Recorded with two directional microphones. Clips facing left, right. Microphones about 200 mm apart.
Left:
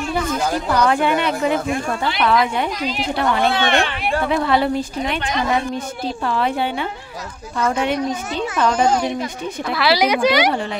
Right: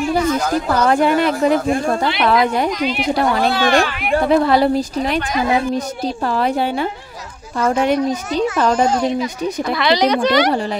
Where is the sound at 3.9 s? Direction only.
30° left (ahead or behind).